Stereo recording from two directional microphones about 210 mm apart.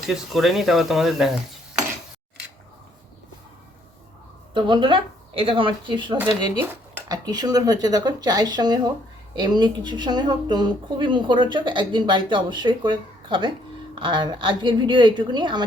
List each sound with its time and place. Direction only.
0.1 s speech: centre (ahead or behind)
4.5 s speech: 20° right (ahead or behind)